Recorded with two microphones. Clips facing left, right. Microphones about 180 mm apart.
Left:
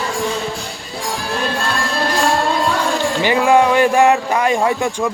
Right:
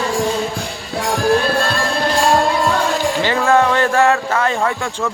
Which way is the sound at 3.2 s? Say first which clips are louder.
Left 3 dB; 15° left (ahead or behind).